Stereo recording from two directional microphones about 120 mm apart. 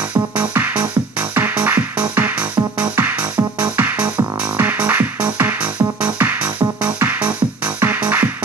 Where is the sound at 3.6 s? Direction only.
15° right (ahead or behind).